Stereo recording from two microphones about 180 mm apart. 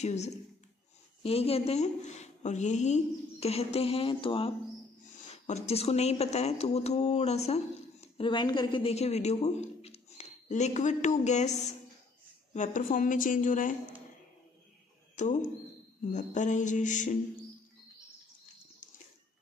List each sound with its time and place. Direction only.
0.0 s a woman's voice: 40° left (ahead or behind)
12.5 s speech: 45° left (ahead or behind)
15.1 s speech: 40° left (ahead or behind)